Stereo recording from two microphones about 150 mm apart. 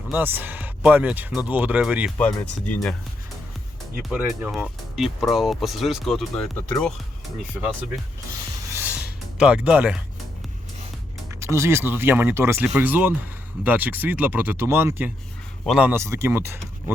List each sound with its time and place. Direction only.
0.1 s speech: 15° right (ahead or behind)
2.1 s speech: 10° left (ahead or behind)
4.1 s speech: 10° right (ahead or behind)
8.7 s music: 10° right (ahead or behind)
11.3 s speech: 20° right (ahead or behind)